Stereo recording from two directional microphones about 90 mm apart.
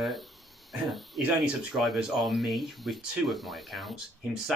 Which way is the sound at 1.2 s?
10° right (ahead or behind).